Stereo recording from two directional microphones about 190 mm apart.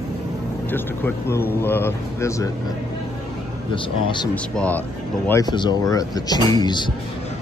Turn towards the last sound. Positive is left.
turn(degrees=20)  # may be behind; listen again after turning